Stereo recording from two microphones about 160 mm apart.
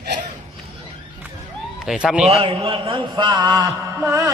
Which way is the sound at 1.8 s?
5° right (ahead or behind).